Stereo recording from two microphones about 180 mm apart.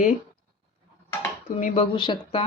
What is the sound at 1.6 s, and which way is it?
Speech, 45° left (ahead or behind).